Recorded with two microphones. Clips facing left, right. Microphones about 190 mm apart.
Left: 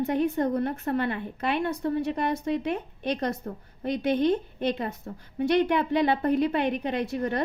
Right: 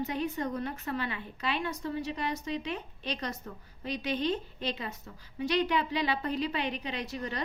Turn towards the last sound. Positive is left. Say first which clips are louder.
# left 8 dB
turn(degrees=55)  # may be behind; listen again after turning